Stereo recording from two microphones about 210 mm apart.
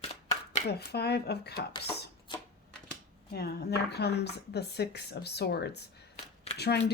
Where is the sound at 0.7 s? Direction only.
50° left (ahead or behind).